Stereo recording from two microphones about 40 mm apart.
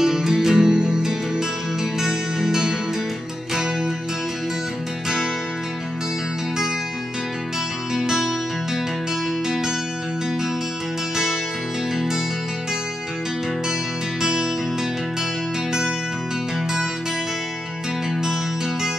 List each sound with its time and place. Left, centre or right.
0.0 s music: centre
7.9 s music: centre
14.2 s music: centre